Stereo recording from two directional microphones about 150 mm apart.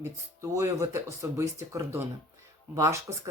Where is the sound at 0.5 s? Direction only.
20° right (ahead or behind).